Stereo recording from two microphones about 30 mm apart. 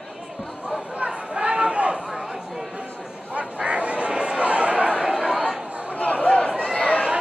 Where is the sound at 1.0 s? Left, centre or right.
Right.